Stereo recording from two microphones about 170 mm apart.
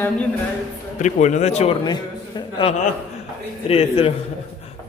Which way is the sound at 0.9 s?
45° left (ahead or behind).